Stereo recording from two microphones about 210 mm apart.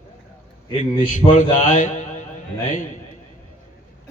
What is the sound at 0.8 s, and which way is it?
A man's voice, 35° left (ahead or behind).